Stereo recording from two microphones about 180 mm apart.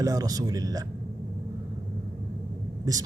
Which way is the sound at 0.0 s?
20° right (ahead or behind).